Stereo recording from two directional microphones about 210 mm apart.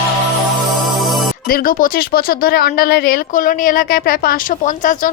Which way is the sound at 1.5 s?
45° left (ahead or behind).